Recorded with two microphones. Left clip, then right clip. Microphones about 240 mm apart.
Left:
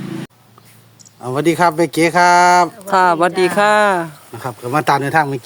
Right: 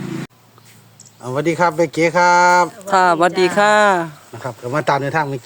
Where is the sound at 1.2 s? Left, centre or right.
Left.